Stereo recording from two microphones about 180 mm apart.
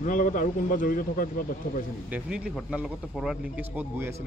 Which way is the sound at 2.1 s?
5° right (ahead or behind).